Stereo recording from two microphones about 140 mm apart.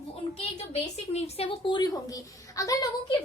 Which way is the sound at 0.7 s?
50° left (ahead or behind).